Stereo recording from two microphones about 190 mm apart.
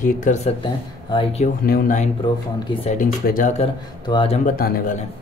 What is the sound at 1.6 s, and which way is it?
Speech, 50° left (ahead or behind).